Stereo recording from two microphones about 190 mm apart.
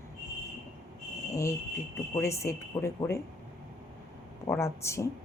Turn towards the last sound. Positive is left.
turn(degrees=15)  # may be behind; listen again after turning